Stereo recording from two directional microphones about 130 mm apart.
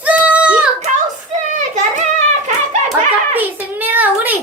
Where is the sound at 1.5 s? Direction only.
70° right (ahead or behind).